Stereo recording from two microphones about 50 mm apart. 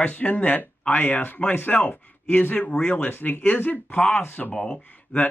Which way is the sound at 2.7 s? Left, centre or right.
Left.